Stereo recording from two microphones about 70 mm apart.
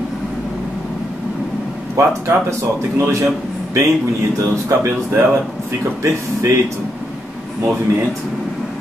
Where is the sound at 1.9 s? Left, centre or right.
Right.